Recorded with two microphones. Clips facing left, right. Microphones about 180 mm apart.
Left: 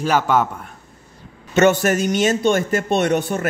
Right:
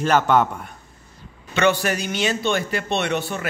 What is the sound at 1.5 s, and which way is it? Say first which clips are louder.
A man's voice: left 5 dB; 45° left (ahead or behind).